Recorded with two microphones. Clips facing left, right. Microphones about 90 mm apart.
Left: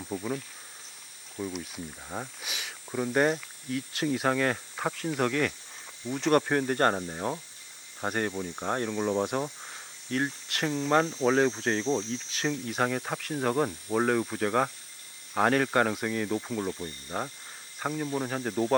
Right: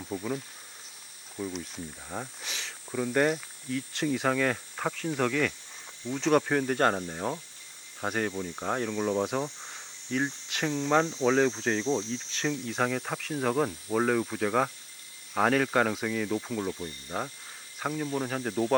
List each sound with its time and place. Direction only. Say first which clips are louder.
0.0 s speech: even; 5° left (ahead or behind)
1.4 s speech: even; 5° left (ahead or behind)